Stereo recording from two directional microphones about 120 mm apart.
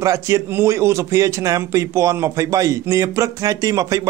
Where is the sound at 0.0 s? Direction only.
25° right (ahead or behind).